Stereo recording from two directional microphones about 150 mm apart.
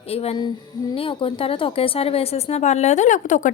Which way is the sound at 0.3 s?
30° left (ahead or behind).